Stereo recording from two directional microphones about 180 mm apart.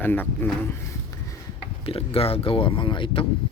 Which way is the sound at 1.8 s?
30° left (ahead or behind).